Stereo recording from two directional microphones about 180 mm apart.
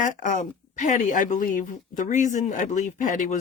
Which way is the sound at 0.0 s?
45° left (ahead or behind).